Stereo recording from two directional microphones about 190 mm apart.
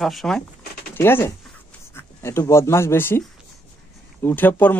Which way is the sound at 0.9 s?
10° left (ahead or behind).